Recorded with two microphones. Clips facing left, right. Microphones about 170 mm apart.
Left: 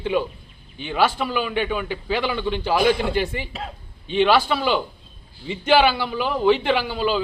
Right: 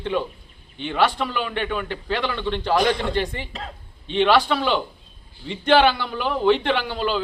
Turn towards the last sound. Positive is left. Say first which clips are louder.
# left 2 dB
turn(degrees=5)  # may be behind; listen again after turning